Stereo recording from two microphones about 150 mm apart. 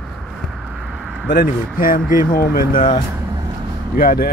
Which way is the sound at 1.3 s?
70° left (ahead or behind).